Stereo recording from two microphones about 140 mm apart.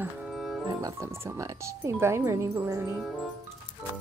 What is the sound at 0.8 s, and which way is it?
Speech, 20° right (ahead or behind).